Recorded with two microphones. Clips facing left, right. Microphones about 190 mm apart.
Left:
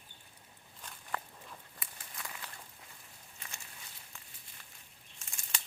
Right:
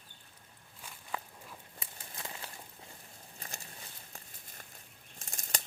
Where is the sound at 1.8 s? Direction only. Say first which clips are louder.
Right 4 dB; 25° right (ahead or behind).